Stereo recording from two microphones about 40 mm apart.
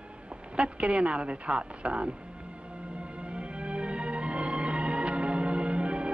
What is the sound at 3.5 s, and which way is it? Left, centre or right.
Music, right.